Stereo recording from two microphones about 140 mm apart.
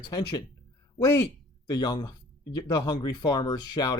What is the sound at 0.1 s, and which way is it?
Speech, 30° left (ahead or behind).